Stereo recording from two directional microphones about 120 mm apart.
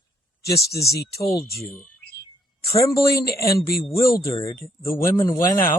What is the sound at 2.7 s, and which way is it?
Speech, 25° left (ahead or behind).